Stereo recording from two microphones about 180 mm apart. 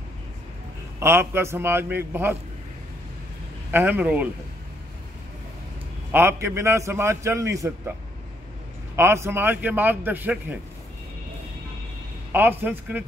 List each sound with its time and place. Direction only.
0.9 s a man's voice: 15° right (ahead or behind)
3.7 s a man's voice: 10° right (ahead or behind)
6.1 s a man's voice: 15° right (ahead or behind)
8.9 s a man's voice: 15° right (ahead or behind)
12.3 s a man's voice: 10° right (ahead or behind)